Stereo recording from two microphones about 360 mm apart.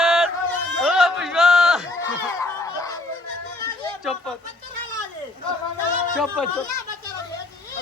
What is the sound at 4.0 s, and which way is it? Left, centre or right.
Speech, centre.